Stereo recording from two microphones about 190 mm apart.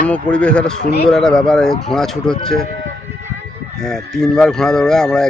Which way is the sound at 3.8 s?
Centre (ahead or behind).